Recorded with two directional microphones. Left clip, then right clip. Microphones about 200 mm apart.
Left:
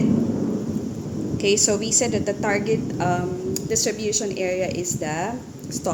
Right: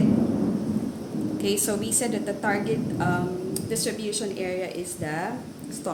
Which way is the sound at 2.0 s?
30° left (ahead or behind).